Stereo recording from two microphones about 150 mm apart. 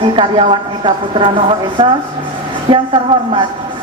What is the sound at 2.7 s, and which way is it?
Speech, 35° right (ahead or behind).